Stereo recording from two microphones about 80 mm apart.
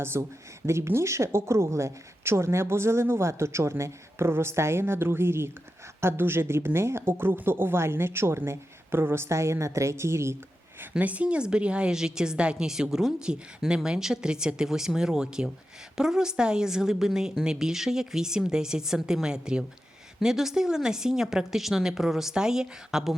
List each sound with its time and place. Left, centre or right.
0.0 s a woman's voice: right
10.9 s a woman's voice: centre